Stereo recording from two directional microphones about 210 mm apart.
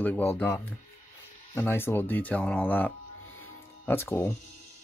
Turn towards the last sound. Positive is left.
turn(degrees=10)  # may be behind; listen again after turning